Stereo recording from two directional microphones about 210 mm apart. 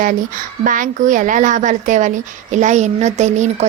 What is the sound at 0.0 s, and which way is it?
A woman's voice, 40° right (ahead or behind).